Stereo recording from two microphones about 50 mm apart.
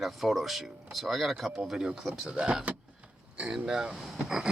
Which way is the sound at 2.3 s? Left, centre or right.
Centre.